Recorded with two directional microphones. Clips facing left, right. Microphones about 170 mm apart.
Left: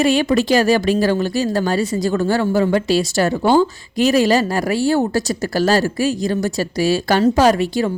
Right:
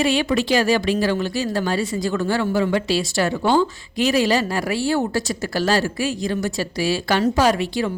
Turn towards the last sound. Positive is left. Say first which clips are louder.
# left 4 dB
turn(degrees=40)  # may be behind; listen again after turning